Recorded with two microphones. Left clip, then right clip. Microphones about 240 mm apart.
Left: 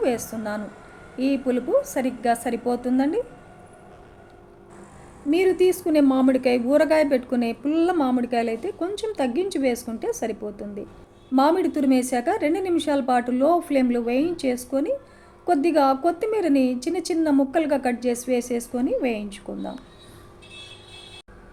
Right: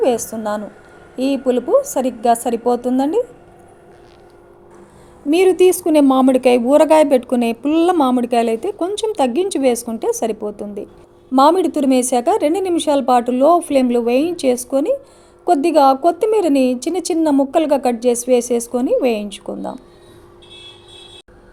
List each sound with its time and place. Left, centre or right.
0.0 s a woman's voice: right
5.3 s a woman's voice: right